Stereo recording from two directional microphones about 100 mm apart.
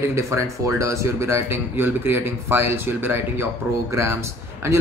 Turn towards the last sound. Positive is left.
turn(degrees=-25)  # may be behind; listen again after turning